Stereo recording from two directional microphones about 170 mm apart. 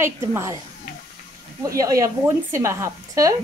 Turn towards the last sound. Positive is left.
turn(degrees=-20)  # may be behind; listen again after turning